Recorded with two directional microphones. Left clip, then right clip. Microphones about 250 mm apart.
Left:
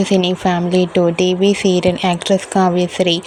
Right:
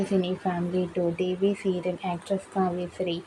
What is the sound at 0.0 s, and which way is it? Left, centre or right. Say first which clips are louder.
Speech: left 12 dB; left.